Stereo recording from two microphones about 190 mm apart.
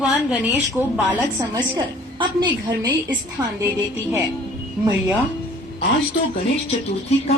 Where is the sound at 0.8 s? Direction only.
10° right (ahead or behind).